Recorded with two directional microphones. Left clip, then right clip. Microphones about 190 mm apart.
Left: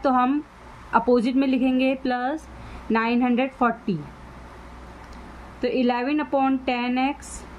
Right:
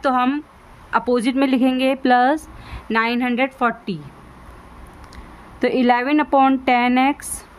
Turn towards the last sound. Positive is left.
turn(degrees=-50)  # may be behind; listen again after turning